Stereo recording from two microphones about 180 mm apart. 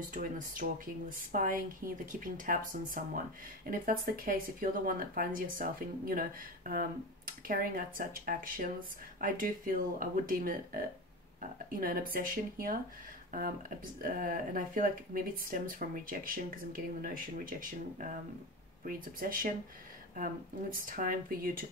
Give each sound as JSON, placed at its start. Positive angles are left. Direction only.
{"t": 0.1, "sound": "speech", "side_deg": -50}
{"t": 20.7, "sound": "speech", "side_deg": -50}